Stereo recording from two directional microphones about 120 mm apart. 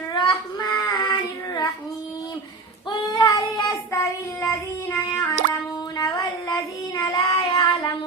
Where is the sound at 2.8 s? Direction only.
35° left (ahead or behind).